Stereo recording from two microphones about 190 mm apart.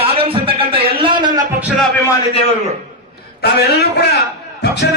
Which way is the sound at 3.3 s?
55° left (ahead or behind).